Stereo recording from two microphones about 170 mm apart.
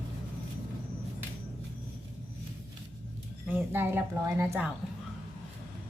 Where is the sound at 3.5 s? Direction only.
10° right (ahead or behind).